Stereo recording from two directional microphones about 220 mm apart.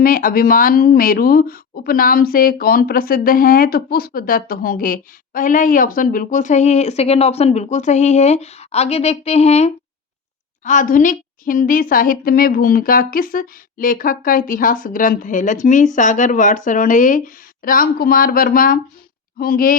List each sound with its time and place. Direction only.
0.0 s speech: 40° left (ahead or behind)